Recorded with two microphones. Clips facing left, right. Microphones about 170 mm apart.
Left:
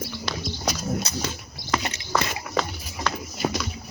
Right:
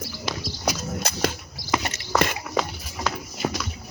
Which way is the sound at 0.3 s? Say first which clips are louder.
Right 2 dB; 15° right (ahead or behind).